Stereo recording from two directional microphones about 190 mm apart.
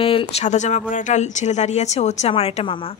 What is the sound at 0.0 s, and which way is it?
Speech, 30° left (ahead or behind).